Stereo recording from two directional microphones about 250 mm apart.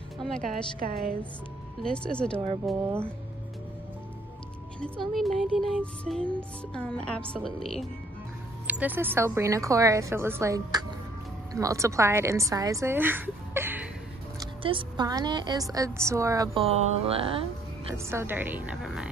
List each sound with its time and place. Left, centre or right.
0.2 s a woman's voice: centre
0.7 s a woman's voice: right
1.8 s music: centre
2.6 s a woman's voice: centre
5.1 s music: centre
8.6 s a woman's voice: centre
14.4 s a woman's voice: centre
17.9 s a woman's voice: centre